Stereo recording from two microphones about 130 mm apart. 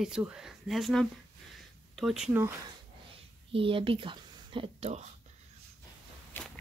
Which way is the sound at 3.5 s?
45° right (ahead or behind).